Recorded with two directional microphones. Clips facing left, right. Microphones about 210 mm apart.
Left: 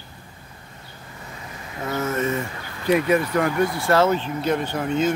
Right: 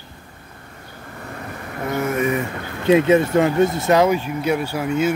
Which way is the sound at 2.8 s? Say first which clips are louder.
Right 5 dB; 25° right (ahead or behind).